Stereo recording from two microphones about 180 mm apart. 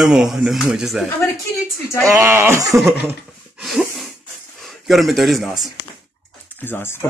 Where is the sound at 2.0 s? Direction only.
15° right (ahead or behind).